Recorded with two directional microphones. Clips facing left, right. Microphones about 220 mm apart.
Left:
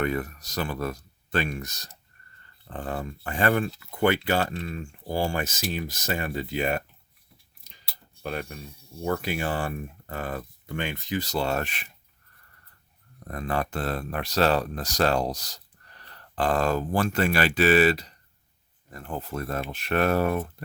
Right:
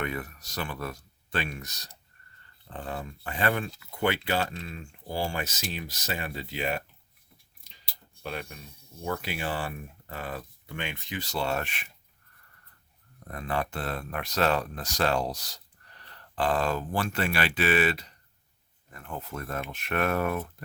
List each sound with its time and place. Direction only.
0.0 s speech: 40° left (ahead or behind)
8.2 s speech: 45° left (ahead or behind)
13.2 s speech: 40° left (ahead or behind)